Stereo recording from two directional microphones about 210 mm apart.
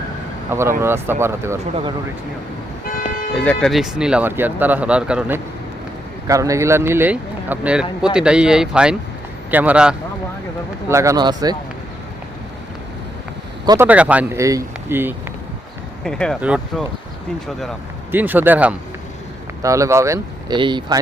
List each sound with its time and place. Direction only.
0.5 s speech: 10° right (ahead or behind)
2.8 s toot: 40° left (ahead or behind)
3.3 s speech: 5° left (ahead or behind)
6.2 s speech: 15° right (ahead or behind)
13.7 s speech: 10° right (ahead or behind)
16.0 s speech: 5° left (ahead or behind)
18.1 s speech: 10° right (ahead or behind)